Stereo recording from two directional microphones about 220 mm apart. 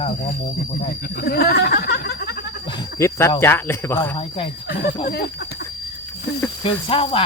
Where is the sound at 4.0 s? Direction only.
25° left (ahead or behind).